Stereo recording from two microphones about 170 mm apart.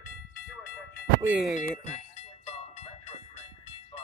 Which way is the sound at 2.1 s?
35° left (ahead or behind).